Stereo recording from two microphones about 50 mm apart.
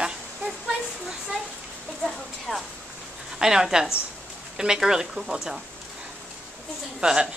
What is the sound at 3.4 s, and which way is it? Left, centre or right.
Speech, centre.